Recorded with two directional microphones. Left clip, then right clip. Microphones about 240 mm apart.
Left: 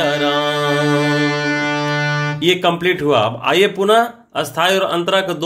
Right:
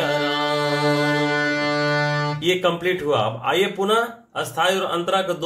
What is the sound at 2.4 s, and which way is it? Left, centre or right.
Speech, left.